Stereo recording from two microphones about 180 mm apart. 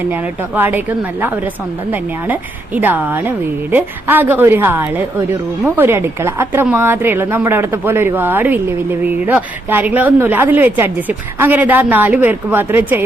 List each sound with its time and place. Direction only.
0.1 s a woman's voice: 10° right (ahead or behind)